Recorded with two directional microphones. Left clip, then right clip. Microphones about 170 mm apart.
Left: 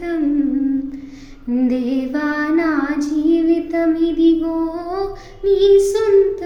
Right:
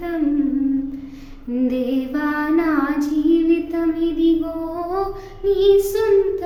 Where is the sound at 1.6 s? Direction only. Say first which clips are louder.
Even; 20° left (ahead or behind).